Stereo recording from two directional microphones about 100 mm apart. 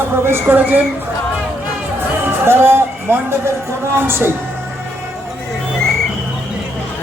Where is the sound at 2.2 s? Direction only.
25° right (ahead or behind).